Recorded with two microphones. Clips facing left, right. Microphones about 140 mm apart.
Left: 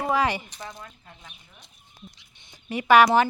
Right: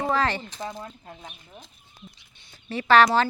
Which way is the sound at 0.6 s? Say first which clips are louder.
Right 5 dB; 30° right (ahead or behind).